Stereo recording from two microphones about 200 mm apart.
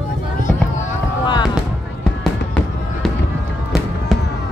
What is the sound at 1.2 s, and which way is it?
Basketball bounce, 20° left (ahead or behind).